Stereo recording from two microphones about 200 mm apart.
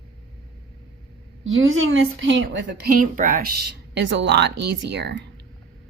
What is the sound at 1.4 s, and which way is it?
A woman's voice, 80° right.